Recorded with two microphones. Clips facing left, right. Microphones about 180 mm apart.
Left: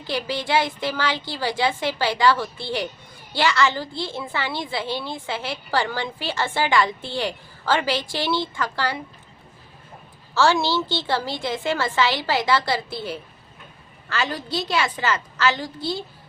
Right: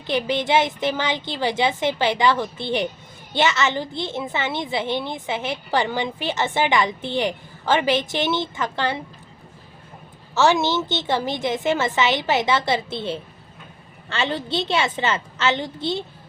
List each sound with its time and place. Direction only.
0.1 s a woman's voice: 20° right (ahead or behind)
10.3 s a woman's voice: 20° right (ahead or behind)